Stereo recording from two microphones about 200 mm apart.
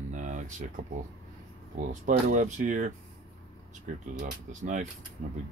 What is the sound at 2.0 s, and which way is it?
Speech, 40° right (ahead or behind).